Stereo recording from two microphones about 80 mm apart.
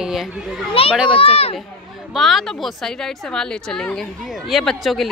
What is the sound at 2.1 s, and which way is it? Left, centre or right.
A woman's voice, centre.